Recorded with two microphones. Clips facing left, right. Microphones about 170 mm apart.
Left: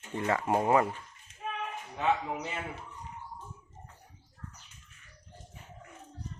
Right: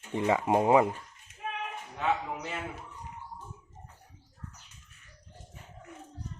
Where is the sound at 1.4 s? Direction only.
70° right (ahead or behind).